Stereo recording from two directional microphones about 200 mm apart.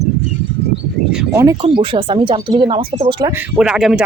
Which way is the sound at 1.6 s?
25° right (ahead or behind).